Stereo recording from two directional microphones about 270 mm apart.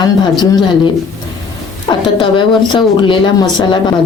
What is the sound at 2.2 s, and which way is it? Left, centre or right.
A woman's voice, centre.